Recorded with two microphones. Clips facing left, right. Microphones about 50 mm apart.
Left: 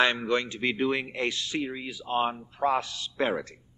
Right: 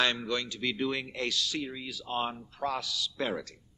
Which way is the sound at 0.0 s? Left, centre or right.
Left.